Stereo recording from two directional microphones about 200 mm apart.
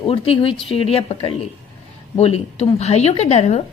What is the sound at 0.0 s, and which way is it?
A woman's voice, 25° left (ahead or behind).